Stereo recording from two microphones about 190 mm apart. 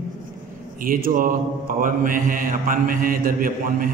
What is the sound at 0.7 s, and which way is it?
Speech, 45° right (ahead or behind).